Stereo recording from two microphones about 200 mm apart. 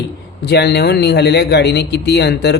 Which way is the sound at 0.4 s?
55° left (ahead or behind).